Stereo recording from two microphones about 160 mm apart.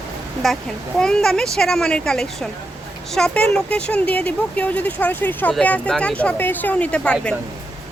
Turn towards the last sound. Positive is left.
turn(degrees=5)  # may be behind; listen again after turning